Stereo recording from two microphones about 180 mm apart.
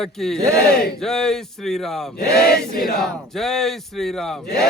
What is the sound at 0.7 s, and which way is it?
Chant, 60° left (ahead or behind).